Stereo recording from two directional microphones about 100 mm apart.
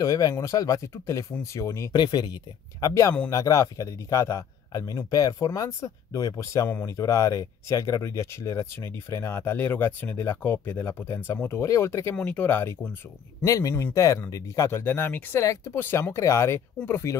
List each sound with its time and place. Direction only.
0.0 s a man's voice: 35° left (ahead or behind)
1.9 s speech: 45° left (ahead or behind)
2.8 s a man's voice: 30° left (ahead or behind)
13.4 s a man's voice: 35° left (ahead or behind)